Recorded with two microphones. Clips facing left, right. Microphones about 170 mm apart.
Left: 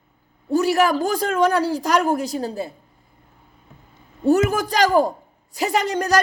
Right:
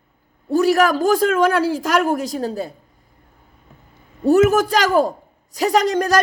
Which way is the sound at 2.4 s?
45° right (ahead or behind).